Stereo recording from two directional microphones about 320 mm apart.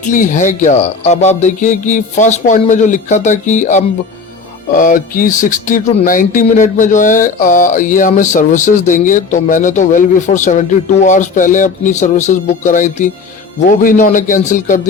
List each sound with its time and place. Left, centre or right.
0.0 s speech: left